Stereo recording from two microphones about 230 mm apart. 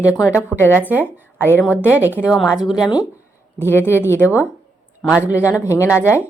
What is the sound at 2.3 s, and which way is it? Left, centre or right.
Speech, centre.